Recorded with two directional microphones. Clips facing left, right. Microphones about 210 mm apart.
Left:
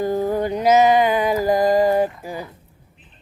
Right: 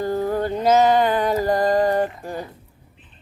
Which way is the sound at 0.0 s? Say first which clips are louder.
Left 2 dB; 15° left (ahead or behind).